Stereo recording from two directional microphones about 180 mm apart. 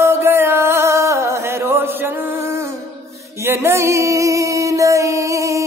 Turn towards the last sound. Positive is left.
turn(degrees=-15)  # may be behind; listen again after turning